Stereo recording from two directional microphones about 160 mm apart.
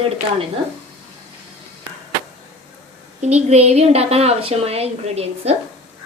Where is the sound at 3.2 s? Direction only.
45° right (ahead or behind).